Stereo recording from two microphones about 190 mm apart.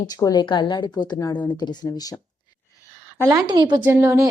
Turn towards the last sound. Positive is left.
turn(degrees=-15)  # may be behind; listen again after turning